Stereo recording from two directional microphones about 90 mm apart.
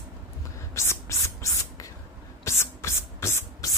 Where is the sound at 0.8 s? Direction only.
35° left (ahead or behind).